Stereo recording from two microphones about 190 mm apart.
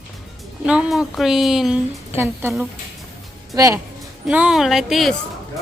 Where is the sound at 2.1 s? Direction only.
10° right (ahead or behind).